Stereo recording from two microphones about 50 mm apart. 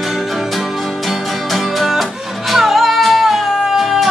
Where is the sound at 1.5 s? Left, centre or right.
Centre.